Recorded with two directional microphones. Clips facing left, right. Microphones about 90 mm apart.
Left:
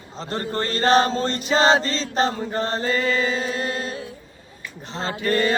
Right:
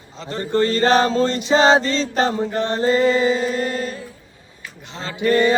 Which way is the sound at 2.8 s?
30° right (ahead or behind).